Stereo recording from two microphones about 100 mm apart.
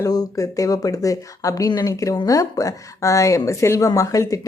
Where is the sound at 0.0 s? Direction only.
35° left (ahead or behind).